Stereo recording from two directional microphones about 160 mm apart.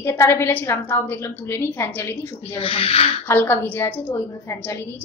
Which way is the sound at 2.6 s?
35° left (ahead or behind).